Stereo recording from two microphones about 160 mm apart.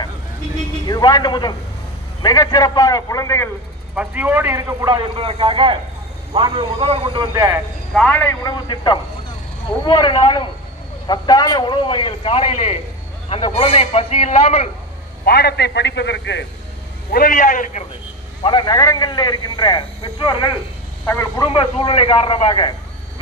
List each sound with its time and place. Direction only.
0.8 s speech: 25° left (ahead or behind)
3.9 s speech: 10° right (ahead or behind)
5.2 s a man's voice: 35° right (ahead or behind)
7.3 s speech: 25° right (ahead or behind)
7.9 s a man's voice: 5° left (ahead or behind)
8.5 s a man's voice: 30° left (ahead or behind)
15.2 s a man's voice: 85° left
17.1 s a man's voice: 60° left (ahead or behind)
18.4 s speech: 30° left (ahead or behind)
21.0 s speech: 15° left (ahead or behind)
21.4 s a man's voice: 35° left (ahead or behind)